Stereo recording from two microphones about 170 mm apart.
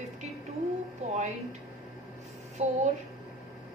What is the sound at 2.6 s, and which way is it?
Speech, 40° right (ahead or behind).